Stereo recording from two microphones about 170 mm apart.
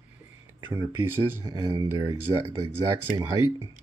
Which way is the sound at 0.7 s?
15° right (ahead or behind).